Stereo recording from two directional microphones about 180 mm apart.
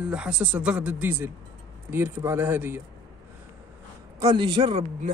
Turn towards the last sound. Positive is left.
turn(degrees=-30)  # may be behind; listen again after turning